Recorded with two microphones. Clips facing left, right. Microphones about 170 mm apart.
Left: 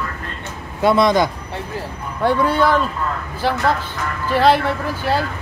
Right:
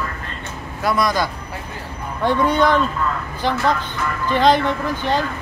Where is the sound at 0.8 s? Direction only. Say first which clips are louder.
Left 5 dB; 25° left (ahead or behind).